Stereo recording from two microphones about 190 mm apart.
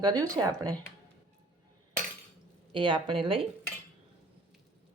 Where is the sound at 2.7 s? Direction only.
25° right (ahead or behind).